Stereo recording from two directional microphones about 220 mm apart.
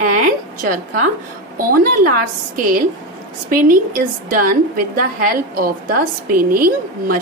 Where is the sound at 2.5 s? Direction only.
40° right (ahead or behind).